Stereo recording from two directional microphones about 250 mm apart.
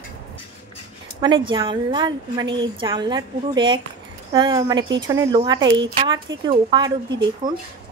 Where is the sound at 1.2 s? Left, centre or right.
Centre.